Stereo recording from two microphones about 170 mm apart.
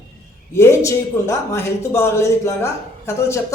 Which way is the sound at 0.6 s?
15° left (ahead or behind).